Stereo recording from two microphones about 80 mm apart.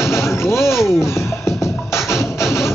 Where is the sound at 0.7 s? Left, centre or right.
Centre.